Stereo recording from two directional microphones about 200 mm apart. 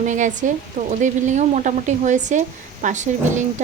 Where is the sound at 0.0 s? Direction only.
40° right (ahead or behind).